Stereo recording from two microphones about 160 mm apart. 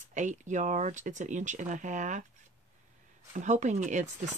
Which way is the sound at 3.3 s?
50° right (ahead or behind).